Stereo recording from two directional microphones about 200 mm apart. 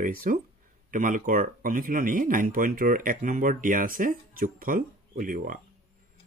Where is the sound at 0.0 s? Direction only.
45° right (ahead or behind).